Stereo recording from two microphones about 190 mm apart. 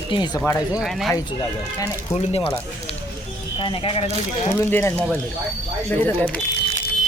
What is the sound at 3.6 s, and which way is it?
Speech, 25° left (ahead or behind).